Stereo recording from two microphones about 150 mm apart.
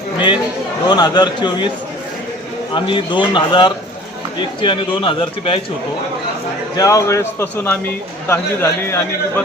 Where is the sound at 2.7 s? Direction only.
35° left (ahead or behind).